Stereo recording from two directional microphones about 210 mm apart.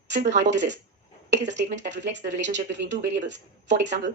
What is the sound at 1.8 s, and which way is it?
Speech, 55° right (ahead or behind).